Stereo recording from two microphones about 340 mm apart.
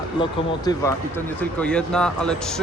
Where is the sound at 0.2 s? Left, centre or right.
Centre.